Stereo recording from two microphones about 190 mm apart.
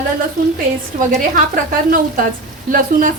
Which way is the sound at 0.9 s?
40° right (ahead or behind).